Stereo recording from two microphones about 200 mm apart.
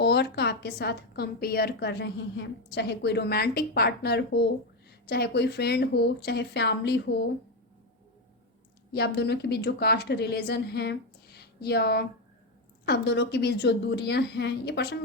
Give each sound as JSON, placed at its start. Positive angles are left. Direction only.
{"t": 0.0, "sound": "a woman's voice", "side_deg": 55}
{"t": 8.9, "sound": "a woman's voice", "side_deg": 55}